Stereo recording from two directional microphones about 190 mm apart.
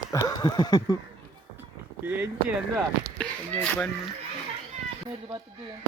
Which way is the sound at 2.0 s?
10° right (ahead or behind).